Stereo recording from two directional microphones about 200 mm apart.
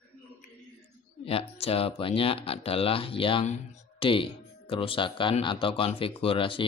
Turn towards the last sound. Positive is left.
turn(degrees=25)  # may be behind; listen again after turning